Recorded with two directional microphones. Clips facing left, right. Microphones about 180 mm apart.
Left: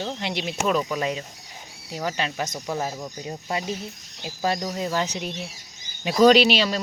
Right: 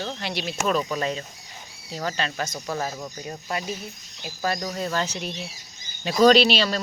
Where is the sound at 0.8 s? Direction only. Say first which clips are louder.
Left 1 dB; 5° left (ahead or behind).